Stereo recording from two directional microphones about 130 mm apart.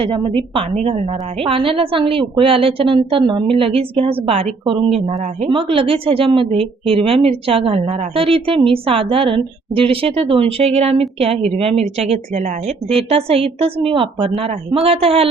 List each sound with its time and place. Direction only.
0.0 s a woman's voice: 40° right (ahead or behind); by 1.0 s 55° right (ahead or behind)
1.5 s a woman's voice: 45° right (ahead or behind)